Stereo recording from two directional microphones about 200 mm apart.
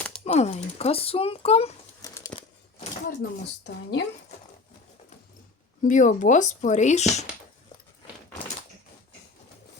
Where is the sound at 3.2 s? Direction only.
60° left (ahead or behind).